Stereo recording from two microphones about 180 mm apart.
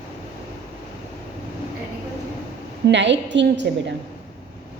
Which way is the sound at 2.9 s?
80° right.